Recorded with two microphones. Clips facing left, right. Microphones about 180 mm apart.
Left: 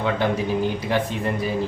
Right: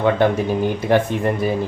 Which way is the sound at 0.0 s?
55° right (ahead or behind).